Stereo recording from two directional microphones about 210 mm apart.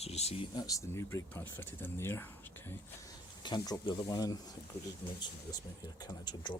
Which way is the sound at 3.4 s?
20° left (ahead or behind).